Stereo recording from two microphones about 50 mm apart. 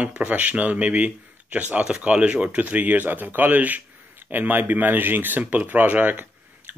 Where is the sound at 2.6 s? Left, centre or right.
Right.